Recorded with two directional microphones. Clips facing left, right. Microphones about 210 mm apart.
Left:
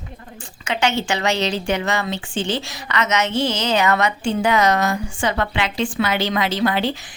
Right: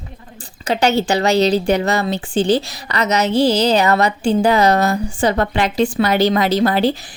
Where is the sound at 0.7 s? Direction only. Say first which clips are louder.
Right 5 dB; 35° right (ahead or behind).